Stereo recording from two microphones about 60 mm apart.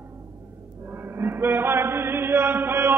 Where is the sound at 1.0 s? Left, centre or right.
Right.